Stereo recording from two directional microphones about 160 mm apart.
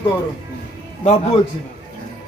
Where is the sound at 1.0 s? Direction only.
40° left (ahead or behind).